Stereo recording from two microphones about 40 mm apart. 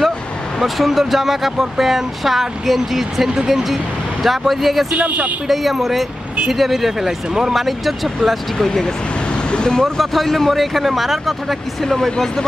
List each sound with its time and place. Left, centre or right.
0.6 s speech: centre
4.9 s speech: right
5.5 s speech: centre
8.5 s speech: centre
9.9 s speech: centre